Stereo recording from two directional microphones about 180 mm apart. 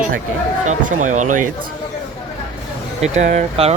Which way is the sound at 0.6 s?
45° right (ahead or behind).